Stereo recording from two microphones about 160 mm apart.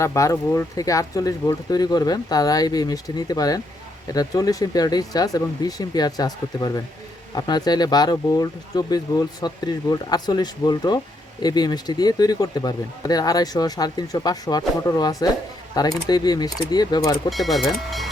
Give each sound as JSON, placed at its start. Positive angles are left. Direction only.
{"t": 0.0, "sound": "speech", "side_deg": 20}
{"t": 17.2, "sound": "speech", "side_deg": 0}